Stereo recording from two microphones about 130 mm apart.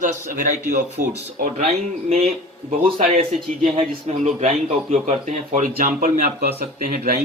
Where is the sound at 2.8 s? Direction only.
50° right (ahead or behind).